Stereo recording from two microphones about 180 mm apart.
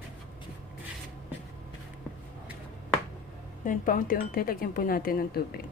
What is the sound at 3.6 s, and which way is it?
Speech, 50° left (ahead or behind).